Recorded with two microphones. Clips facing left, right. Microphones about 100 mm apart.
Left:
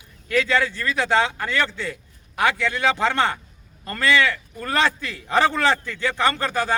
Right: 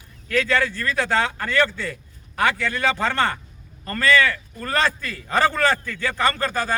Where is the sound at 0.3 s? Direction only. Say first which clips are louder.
Even; 15° left (ahead or behind).